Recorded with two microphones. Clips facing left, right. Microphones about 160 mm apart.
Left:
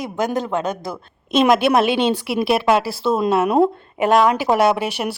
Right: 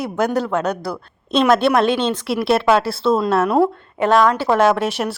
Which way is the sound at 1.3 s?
15° left (ahead or behind).